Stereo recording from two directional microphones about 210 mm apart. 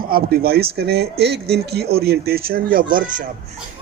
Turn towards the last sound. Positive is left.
turn(degrees=-40)  # may be behind; listen again after turning